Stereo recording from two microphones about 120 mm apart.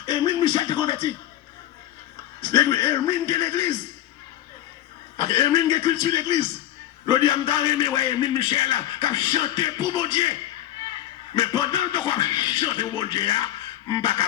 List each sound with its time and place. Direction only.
0.0 s music: 35° left (ahead or behind)
2.4 s a man's voice: 25° left (ahead or behind)
5.1 s a man's voice: 35° left (ahead or behind)
11.3 s a man's voice: 40° left (ahead or behind)